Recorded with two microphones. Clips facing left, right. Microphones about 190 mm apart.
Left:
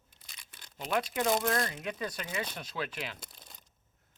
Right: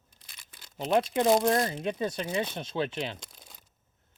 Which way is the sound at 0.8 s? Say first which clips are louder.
Right 6 dB; 25° right (ahead or behind).